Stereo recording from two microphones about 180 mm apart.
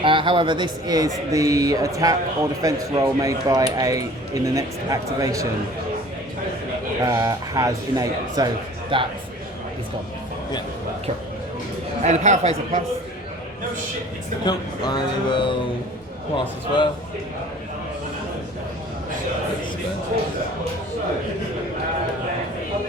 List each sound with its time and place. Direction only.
0.0 s speech: 25° right (ahead or behind)
7.0 s speech: 20° right (ahead or behind)
12.0 s speech: 40° right (ahead or behind)
14.4 s speech: 25° left (ahead or behind)